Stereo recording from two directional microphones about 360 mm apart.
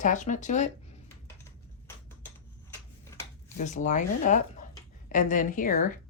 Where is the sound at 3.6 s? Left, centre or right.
Centre.